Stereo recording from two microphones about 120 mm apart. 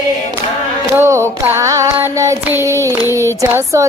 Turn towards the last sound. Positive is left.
turn(degrees=-20)  # may be behind; listen again after turning